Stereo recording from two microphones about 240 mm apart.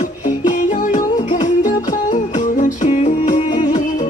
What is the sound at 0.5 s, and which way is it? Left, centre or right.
Music, left.